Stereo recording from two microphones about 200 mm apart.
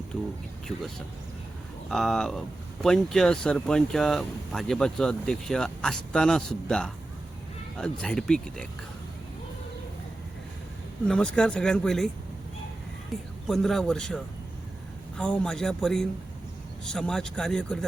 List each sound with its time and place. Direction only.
1.9 s speech: centre (ahead or behind)
11.0 s speech: 5° left (ahead or behind)
13.5 s speech: centre (ahead or behind)
15.2 s speech: 5° left (ahead or behind)